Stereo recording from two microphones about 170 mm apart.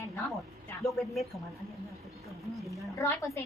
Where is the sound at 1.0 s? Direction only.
Centre (ahead or behind).